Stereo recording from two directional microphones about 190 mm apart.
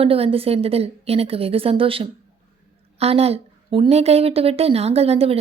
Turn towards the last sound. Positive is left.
turn(degrees=-30)  # may be behind; listen again after turning